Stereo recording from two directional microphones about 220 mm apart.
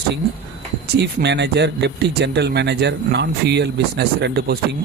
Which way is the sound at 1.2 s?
50° right (ahead or behind).